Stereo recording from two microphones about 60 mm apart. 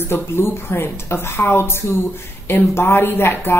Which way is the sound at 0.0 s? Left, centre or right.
Left.